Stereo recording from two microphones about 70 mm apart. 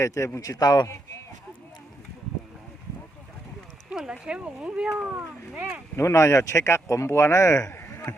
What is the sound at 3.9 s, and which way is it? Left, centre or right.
Speech, centre.